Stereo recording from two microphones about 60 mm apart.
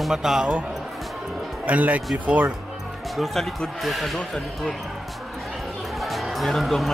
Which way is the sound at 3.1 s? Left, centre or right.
Centre.